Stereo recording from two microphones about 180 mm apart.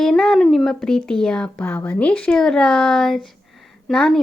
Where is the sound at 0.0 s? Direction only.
5° left (ahead or behind).